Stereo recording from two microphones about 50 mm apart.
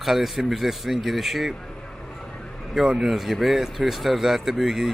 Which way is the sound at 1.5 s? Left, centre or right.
Centre.